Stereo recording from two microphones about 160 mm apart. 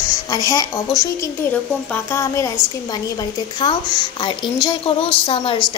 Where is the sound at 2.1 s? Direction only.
20° left (ahead or behind); by 5.6 s 35° left (ahead or behind).